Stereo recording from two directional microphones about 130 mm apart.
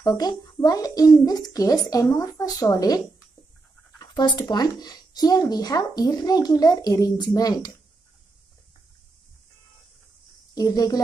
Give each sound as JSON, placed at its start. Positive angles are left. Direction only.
{"t": 0.0, "sound": "a child's voice", "side_deg": 30}
{"t": 4.0, "sound": "speech", "side_deg": 30}
{"t": 10.5, "sound": "speech", "side_deg": 30}